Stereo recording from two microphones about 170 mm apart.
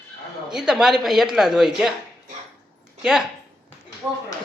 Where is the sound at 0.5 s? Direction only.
5° right (ahead or behind).